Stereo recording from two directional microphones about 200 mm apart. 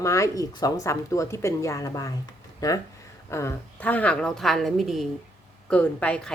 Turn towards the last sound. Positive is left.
turn(degrees=5)  # may be behind; listen again after turning